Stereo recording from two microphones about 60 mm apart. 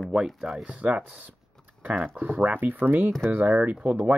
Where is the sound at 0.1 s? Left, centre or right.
Centre.